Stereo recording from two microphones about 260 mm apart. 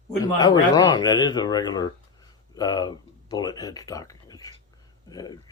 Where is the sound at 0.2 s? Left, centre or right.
Centre.